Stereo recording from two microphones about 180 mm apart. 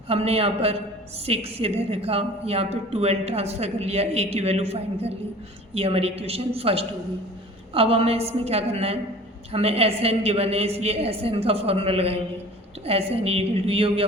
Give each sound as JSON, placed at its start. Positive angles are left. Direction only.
{"t": 0.1, "sound": "a woman's voice", "side_deg": -35}